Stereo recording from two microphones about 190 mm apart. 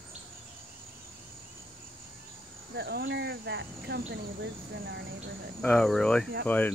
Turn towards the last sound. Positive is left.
turn(degrees=10)  # may be behind; listen again after turning